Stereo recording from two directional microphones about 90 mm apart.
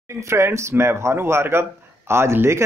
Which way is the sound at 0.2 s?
30° right (ahead or behind).